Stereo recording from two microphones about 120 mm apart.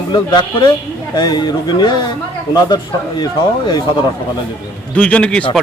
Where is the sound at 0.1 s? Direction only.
35° left (ahead or behind).